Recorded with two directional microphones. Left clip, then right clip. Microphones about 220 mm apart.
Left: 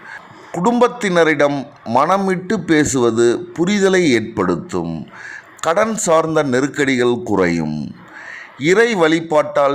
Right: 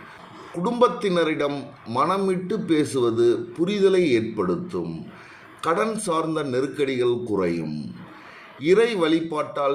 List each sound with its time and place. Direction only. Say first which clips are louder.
0.5 s a man's voice: left 6 dB; 45° left (ahead or behind)